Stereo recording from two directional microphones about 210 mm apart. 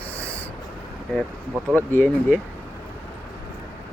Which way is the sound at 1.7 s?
10° left (ahead or behind).